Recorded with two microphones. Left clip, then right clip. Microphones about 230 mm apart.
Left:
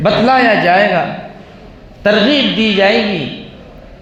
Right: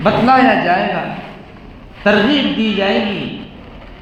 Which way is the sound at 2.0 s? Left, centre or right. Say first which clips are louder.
Left 2 dB; left.